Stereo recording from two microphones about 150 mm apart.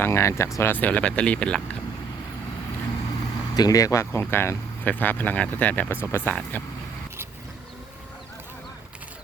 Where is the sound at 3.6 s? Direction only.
25° left (ahead or behind).